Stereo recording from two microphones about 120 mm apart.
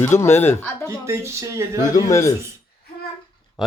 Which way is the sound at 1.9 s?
25° left (ahead or behind).